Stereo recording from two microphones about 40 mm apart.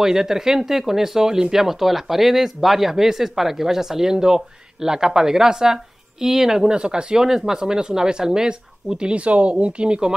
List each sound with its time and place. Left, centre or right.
0.0 s speech: centre
6.7 s speech: right